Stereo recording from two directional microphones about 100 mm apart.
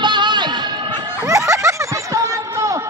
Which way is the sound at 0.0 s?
50° right (ahead or behind).